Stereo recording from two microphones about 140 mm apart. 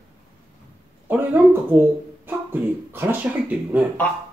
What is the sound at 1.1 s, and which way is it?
Speech, 15° right (ahead or behind).